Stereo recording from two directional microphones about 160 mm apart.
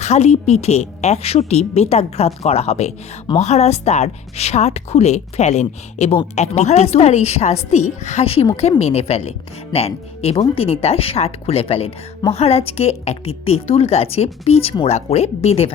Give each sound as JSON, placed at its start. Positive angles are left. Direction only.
{"t": 0.0, "sound": "a woman's voice", "side_deg": 45}